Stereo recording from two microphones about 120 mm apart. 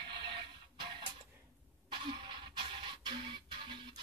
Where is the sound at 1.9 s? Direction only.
40° right (ahead or behind).